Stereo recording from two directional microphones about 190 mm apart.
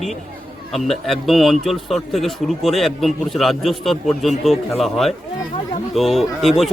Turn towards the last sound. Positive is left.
turn(degrees=0)  # may be behind; listen again after turning